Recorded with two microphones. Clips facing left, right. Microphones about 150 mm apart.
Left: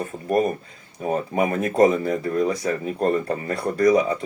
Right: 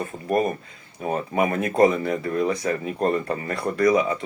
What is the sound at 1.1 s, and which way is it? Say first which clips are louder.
Speech: left 1 dB; 40° left (ahead or behind).